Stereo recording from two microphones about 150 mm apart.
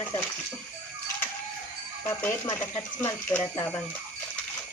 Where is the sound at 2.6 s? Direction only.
10° left (ahead or behind).